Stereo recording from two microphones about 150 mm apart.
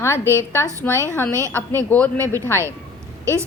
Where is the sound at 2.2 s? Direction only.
20° right (ahead or behind).